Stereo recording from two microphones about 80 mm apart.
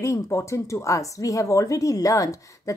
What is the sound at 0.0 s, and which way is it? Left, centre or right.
Speech, left.